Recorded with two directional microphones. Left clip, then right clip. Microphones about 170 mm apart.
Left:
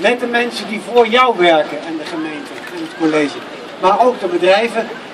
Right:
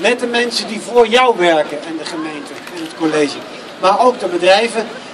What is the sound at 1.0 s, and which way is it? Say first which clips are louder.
Speech: even; 10° right (ahead or behind).